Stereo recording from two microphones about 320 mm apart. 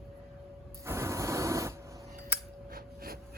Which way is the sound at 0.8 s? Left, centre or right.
Centre.